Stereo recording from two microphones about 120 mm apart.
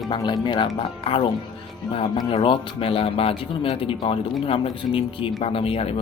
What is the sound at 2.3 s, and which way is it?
Speech, 45° left (ahead or behind).